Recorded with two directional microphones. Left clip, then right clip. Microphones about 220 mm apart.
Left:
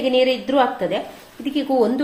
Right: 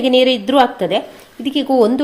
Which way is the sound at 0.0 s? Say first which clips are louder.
Right 5 dB; 50° right (ahead or behind).